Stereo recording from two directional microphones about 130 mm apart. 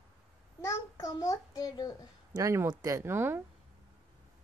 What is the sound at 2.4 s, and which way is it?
Speech, 25° right (ahead or behind).